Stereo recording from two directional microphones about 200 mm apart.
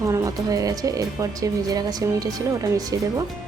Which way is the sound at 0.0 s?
15° right (ahead or behind).